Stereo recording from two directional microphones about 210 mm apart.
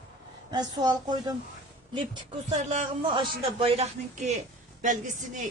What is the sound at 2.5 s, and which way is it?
A woman's voice, 35° right (ahead or behind).